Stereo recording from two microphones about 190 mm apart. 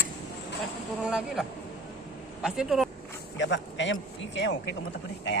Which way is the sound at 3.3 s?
70° left (ahead or behind).